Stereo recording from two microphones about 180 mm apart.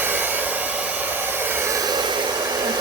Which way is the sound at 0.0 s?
10° right (ahead or behind).